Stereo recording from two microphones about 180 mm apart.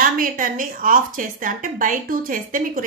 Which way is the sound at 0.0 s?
50° right (ahead or behind).